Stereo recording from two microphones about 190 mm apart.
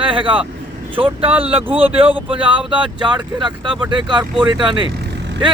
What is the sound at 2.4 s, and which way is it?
Speech, 25° right (ahead or behind).